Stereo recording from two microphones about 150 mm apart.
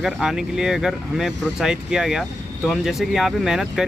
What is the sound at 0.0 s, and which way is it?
Speech, 5° right (ahead or behind).